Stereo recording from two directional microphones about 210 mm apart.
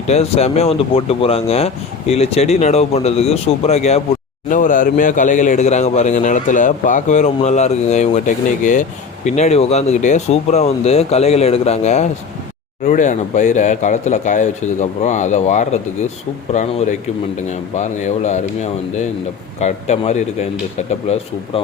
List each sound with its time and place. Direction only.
0.1 s a man's voice: 30° left (ahead or behind)